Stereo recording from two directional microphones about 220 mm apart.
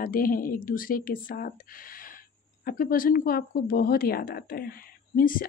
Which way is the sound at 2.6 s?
40° left (ahead or behind).